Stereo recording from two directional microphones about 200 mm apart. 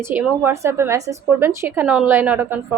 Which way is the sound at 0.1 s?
10° right (ahead or behind).